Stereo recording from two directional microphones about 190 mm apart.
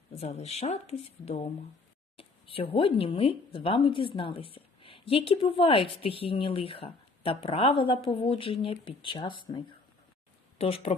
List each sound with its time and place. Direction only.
0.1 s speech: 35° left (ahead or behind)
10.6 s speech: 30° left (ahead or behind)